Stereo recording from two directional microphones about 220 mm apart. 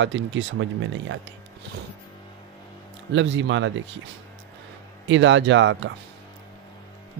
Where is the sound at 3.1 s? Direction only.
55° right (ahead or behind).